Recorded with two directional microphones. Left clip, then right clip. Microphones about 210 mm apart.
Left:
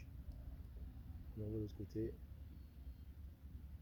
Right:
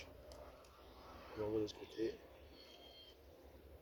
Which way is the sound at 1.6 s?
45° left (ahead or behind).